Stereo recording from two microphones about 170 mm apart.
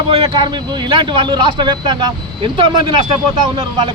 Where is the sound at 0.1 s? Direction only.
30° right (ahead or behind).